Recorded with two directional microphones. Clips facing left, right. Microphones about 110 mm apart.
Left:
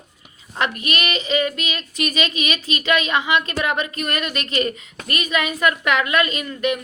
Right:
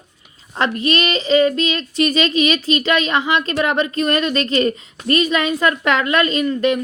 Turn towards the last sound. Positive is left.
turn(degrees=-30)  # may be behind; listen again after turning